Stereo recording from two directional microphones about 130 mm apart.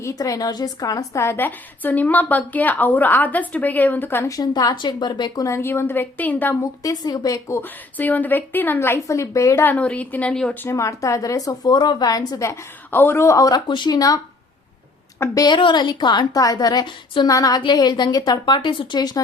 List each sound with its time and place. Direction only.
0.0 s a woman's voice: 25° left (ahead or behind)
4.4 s a woman's voice: 30° left (ahead or behind); by 6.6 s 15° left (ahead or behind)
6.8 s a woman's voice: 30° left (ahead or behind)
15.2 s a woman's voice: 30° left (ahead or behind)